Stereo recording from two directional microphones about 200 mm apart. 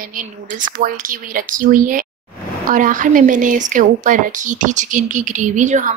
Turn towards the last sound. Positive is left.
turn(degrees=-40)  # may be behind; listen again after turning